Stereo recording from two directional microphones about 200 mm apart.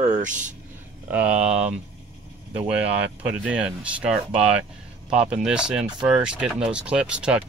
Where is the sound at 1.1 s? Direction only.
5° right (ahead or behind).